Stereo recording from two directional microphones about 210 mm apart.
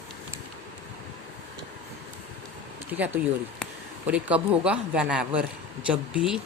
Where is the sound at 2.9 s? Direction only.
5° right (ahead or behind).